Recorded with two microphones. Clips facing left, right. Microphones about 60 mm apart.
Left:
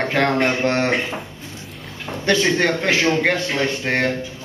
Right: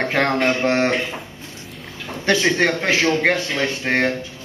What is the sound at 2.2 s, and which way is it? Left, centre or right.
Speech, centre.